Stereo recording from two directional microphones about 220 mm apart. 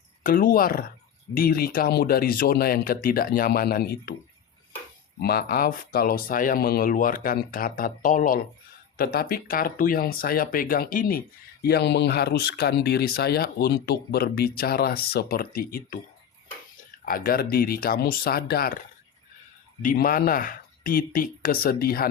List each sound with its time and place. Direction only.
0.2 s speech: 40° left (ahead or behind)
5.2 s speech: 45° left (ahead or behind)
17.1 s speech: 40° left (ahead or behind)
19.8 s speech: 40° left (ahead or behind)